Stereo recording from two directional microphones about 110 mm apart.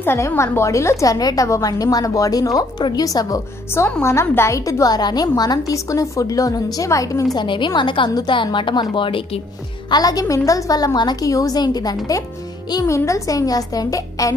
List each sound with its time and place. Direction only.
0.0 s a woman's voice: 20° left (ahead or behind)
7.3 s a woman's voice: 45° left (ahead or behind)
9.8 s a woman's voice: 35° left (ahead or behind)